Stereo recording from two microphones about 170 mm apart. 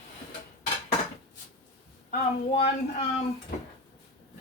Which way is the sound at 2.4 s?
35° left (ahead or behind).